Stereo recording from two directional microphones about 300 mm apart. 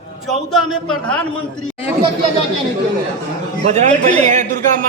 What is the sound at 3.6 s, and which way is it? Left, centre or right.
A man's voice, right.